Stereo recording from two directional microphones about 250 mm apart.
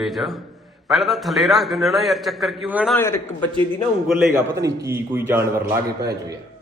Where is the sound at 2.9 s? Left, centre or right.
Centre.